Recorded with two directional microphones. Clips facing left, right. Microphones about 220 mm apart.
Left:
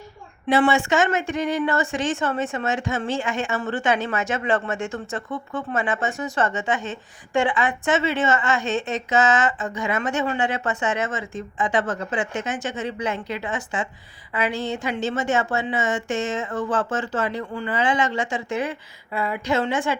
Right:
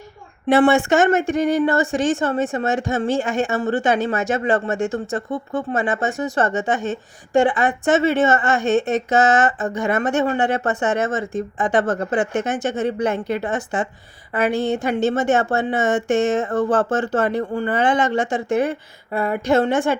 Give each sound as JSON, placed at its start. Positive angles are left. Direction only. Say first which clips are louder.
{"t": 0.4, "sound": "speech", "louder": "right 5 dB", "side_deg": -55}
{"t": 9.5, "sound": "speech", "louder": "right 4 dB", "side_deg": -40}
{"t": 9.7, "sound": "a woman's voice", "louder": "right 5 dB", "side_deg": -55}